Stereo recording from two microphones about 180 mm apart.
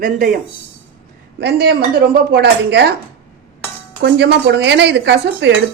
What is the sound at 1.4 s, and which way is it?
Speech, 65° right (ahead or behind).